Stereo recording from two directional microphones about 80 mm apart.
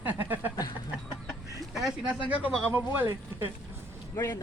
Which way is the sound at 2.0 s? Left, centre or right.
Centre.